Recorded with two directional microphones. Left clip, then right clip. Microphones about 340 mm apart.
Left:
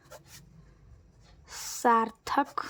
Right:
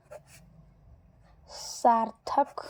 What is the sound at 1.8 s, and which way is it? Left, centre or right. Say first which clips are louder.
Speech: right 1 dB; centre.